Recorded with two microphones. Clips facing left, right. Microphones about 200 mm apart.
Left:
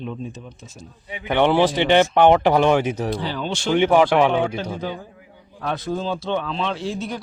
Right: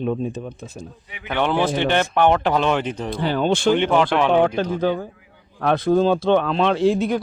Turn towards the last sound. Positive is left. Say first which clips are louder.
# right 9 dB
turn(degrees=-55)  # may be behind; listen again after turning